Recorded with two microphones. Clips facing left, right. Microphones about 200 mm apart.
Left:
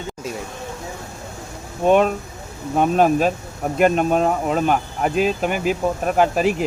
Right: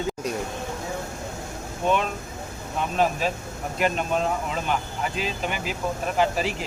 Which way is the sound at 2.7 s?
50° left (ahead or behind).